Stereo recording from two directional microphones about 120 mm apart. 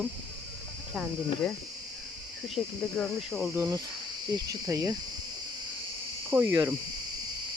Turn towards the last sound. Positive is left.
turn(degrees=-25)  # may be behind; listen again after turning